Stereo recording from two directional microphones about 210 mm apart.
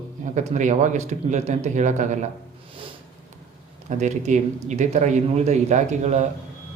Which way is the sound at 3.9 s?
35° right (ahead or behind).